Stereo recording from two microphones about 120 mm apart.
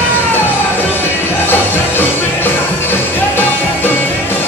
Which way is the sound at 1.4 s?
20° left (ahead or behind).